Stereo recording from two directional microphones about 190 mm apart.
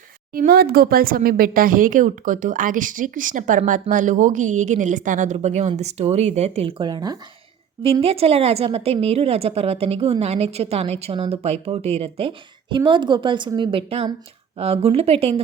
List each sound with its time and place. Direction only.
0.3 s speech: 50° right (ahead or behind); by 7.2 s 20° right (ahead or behind)
8.0 s a woman's voice: 30° right (ahead or behind)